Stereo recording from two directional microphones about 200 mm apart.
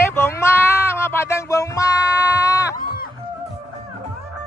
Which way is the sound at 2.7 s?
45° left (ahead or behind).